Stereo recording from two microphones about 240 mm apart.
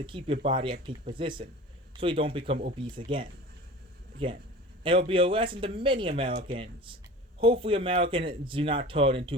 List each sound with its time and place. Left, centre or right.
0.0 s speech: right
4.2 s speech: right